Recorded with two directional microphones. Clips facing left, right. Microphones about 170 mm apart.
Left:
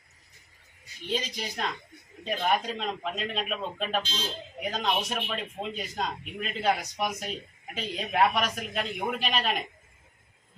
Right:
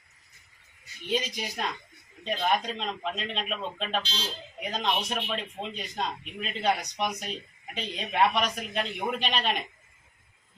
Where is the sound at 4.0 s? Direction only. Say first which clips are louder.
Left 1 dB; 50° left (ahead or behind).